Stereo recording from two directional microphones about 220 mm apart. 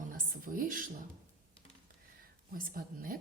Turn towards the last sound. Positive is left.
turn(degrees=-40)  # may be behind; listen again after turning